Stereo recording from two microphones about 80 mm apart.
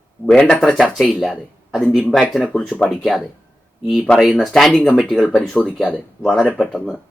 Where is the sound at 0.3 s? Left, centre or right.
Centre.